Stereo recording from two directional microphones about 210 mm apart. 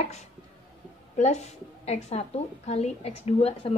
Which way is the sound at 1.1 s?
35° left (ahead or behind).